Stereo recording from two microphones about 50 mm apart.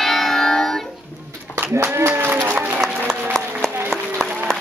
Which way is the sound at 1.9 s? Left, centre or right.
Right.